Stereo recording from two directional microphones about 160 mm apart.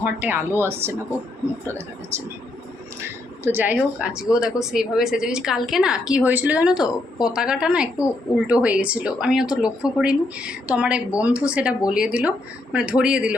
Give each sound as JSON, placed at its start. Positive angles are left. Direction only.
{"t": 0.0, "sound": "speech", "side_deg": -10}